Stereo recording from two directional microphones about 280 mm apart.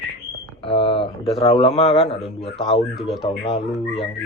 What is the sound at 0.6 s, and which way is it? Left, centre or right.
Speech, centre.